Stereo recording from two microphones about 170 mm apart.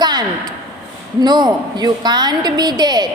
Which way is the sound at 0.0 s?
25° right (ahead or behind).